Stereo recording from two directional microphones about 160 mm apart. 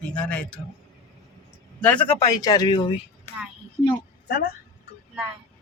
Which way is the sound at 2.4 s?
25° left (ahead or behind).